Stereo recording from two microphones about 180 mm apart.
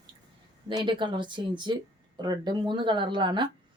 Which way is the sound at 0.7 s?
25° right (ahead or behind).